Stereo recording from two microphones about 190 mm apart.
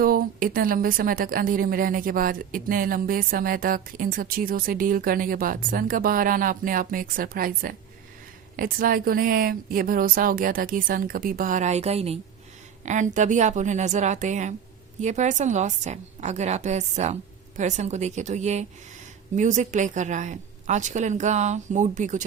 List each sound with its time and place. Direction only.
0.0 s a woman's voice: 50° right (ahead or behind)